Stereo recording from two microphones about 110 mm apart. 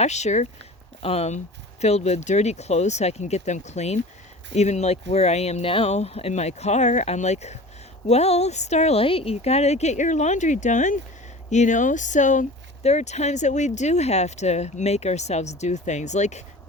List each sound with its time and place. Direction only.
0.0 s speech: 90° left
1.0 s speech: 75° left (ahead or behind); by 7.6 s 90° left
8.0 s speech: 75° left (ahead or behind)